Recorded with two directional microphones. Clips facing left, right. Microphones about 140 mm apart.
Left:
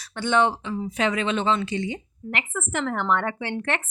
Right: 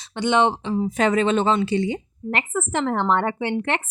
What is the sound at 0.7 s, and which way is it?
A woman's voice, 40° right (ahead or behind).